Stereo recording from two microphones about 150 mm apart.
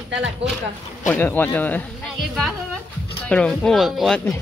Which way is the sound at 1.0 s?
10° left (ahead or behind).